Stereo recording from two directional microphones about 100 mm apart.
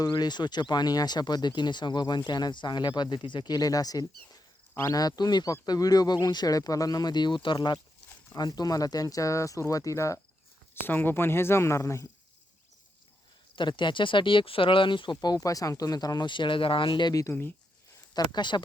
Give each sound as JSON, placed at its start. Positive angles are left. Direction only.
{"t": 0.1, "sound": "speech", "side_deg": 45}
{"t": 10.8, "sound": "speech", "side_deg": 20}
{"t": 13.6, "sound": "speech", "side_deg": 50}
{"t": 15.2, "sound": "speech", "side_deg": 40}